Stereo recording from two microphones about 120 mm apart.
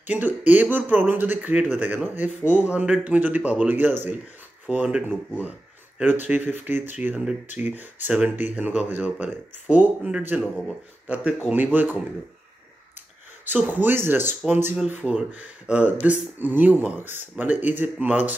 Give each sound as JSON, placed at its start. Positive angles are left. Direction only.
{"t": 0.0, "sound": "speech", "side_deg": -15}
{"t": 13.5, "sound": "speech", "side_deg": -15}
{"t": 14.4, "sound": "speech", "side_deg": -5}